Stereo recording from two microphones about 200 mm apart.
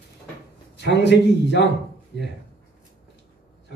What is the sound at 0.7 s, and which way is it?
Speech, 60° left (ahead or behind).